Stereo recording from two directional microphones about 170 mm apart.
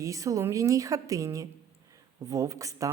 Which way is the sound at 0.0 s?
20° right (ahead or behind).